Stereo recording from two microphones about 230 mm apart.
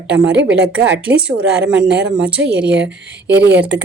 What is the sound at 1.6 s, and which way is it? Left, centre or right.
Speech, right.